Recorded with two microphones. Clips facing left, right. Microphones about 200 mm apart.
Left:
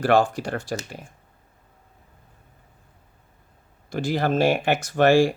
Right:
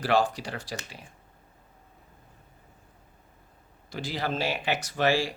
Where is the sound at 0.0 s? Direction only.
50° left (ahead or behind).